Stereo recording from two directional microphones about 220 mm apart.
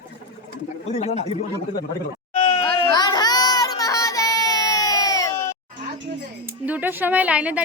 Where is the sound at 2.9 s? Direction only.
20° left (ahead or behind).